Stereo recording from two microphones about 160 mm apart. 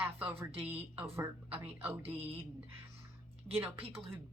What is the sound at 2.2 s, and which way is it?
Speech, 35° right (ahead or behind).